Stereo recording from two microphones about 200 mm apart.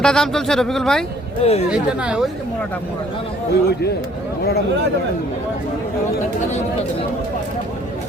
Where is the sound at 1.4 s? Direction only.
30° left (ahead or behind).